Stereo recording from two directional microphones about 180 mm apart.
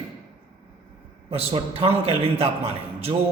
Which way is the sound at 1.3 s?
30° right (ahead or behind).